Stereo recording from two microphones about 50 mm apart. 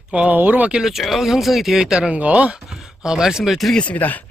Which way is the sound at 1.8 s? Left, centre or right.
Centre.